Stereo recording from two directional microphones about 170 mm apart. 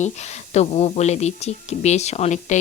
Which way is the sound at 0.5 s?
40° left (ahead or behind).